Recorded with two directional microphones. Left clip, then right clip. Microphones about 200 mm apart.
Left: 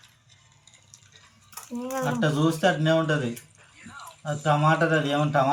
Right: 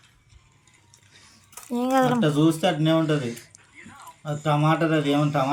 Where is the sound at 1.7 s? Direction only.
55° right (ahead or behind).